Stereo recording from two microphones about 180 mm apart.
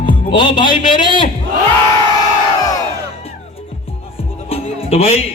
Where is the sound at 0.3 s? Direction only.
25° left (ahead or behind).